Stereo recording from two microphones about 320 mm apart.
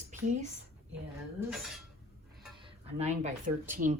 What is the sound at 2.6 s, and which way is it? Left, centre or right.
Music, centre.